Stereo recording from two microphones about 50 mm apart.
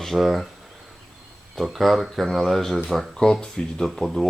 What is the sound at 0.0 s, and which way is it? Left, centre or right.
Speech, centre.